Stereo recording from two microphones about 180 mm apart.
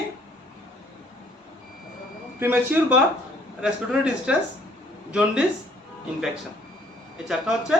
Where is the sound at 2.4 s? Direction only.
10° right (ahead or behind).